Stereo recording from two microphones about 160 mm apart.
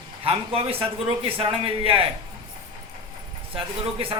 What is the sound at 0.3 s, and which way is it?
A man's voice, 35° right (ahead or behind).